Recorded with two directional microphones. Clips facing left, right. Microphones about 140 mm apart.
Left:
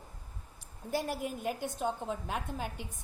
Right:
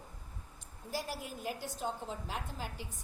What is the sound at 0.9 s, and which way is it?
A woman's voice, 55° left (ahead or behind).